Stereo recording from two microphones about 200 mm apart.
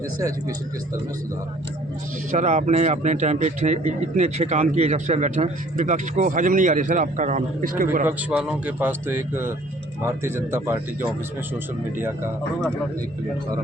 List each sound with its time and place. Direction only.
0.2 s a man's voice: 15° right (ahead or behind)
2.3 s a man's voice: 35° right (ahead or behind)
8.0 s a man's voice: 5° right (ahead or behind)